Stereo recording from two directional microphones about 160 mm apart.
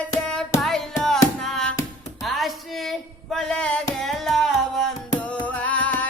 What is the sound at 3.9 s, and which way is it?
Music, centre (ahead or behind).